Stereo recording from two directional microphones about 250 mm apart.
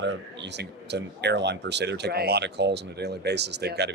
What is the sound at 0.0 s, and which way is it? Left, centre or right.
Speech, right.